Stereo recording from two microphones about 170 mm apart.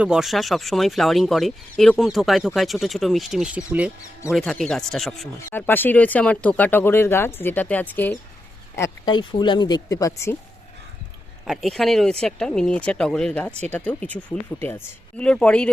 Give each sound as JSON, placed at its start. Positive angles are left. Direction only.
{"t": 0.0, "sound": "speech", "side_deg": -5}
{"t": 5.5, "sound": "speech", "side_deg": 10}
{"t": 9.1, "sound": "speech", "side_deg": 25}
{"t": 11.4, "sound": "speech", "side_deg": 0}